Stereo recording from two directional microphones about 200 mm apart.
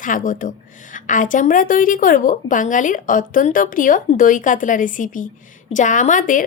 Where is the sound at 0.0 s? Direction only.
40° left (ahead or behind).